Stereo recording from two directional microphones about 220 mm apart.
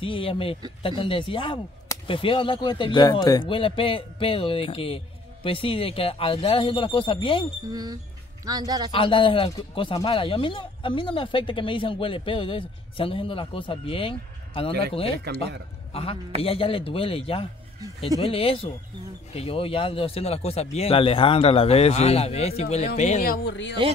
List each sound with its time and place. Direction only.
0.0 s speech: 25° left (ahead or behind)
7.7 s a man's voice: 15° right (ahead or behind)
8.9 s speech: 25° left (ahead or behind)
15.3 s speech: 50° right (ahead or behind)
15.9 s a man's voice: 25° left (ahead or behind); by 23.8 s 50° left (ahead or behind)